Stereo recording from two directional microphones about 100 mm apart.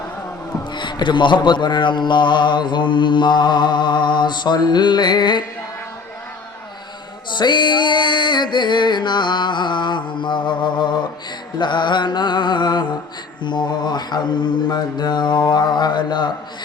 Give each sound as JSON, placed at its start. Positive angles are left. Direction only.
{"t": 0.7, "sound": "mantra", "side_deg": 50}
{"t": 7.3, "sound": "mantra", "side_deg": 50}